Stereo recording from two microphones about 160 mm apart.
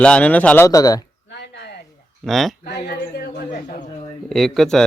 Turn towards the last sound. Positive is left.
turn(degrees=5)  # may be behind; listen again after turning